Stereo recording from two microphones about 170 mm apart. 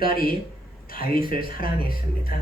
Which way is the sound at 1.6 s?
60° left (ahead or behind).